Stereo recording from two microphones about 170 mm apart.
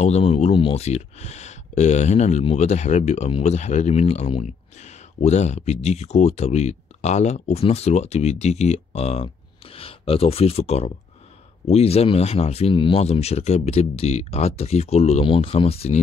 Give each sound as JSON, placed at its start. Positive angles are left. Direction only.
{"t": 0.0, "sound": "speech", "side_deg": 40}